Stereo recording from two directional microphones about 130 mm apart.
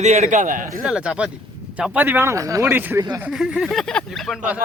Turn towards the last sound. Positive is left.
turn(degrees=0)  # may be behind; listen again after turning